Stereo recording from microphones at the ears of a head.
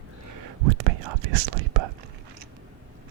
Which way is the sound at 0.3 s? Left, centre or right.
Right.